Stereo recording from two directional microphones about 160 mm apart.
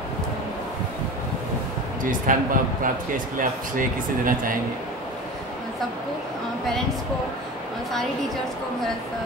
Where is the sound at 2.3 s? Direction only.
55° right (ahead or behind).